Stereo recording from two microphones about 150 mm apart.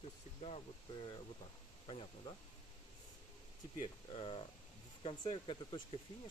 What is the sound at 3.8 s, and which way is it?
Speech, 35° left (ahead or behind).